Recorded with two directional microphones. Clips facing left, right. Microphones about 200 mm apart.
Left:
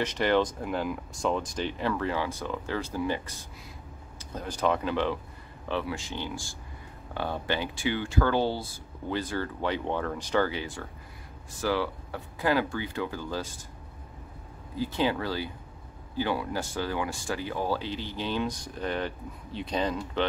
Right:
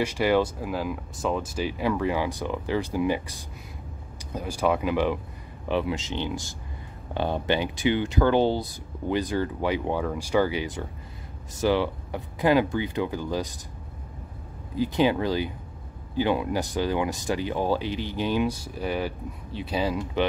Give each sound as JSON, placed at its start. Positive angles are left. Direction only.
{"t": 0.0, "sound": "speech", "side_deg": -10}
{"t": 14.8, "sound": "speech", "side_deg": -15}